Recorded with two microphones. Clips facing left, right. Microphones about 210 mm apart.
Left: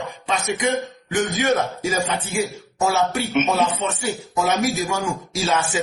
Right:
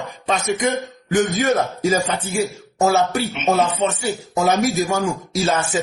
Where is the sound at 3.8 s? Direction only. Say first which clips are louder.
Right 4 dB; 35° right (ahead or behind).